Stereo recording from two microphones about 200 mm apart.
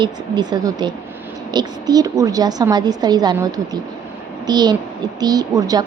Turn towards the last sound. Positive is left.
turn(degrees=-20)  # may be behind; listen again after turning